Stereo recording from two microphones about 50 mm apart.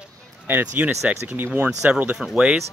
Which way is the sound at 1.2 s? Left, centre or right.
Right.